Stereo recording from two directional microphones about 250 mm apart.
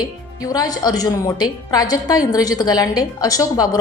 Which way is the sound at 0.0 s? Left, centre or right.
Centre.